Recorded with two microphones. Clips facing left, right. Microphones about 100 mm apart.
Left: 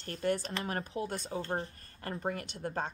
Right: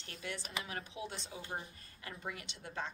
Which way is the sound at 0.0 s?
45° left (ahead or behind).